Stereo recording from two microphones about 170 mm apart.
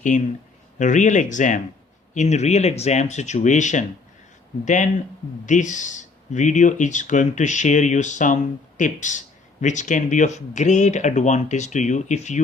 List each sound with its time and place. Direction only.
0.1 s speech: 50° left (ahead or behind)